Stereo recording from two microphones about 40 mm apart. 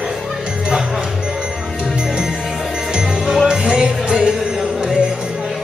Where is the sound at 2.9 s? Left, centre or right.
Right.